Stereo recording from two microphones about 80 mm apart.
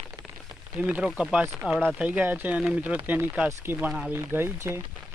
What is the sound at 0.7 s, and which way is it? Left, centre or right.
Speech, centre.